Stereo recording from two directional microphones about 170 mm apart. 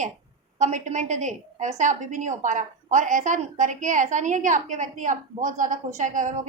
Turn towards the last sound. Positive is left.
turn(degrees=-50)  # may be behind; listen again after turning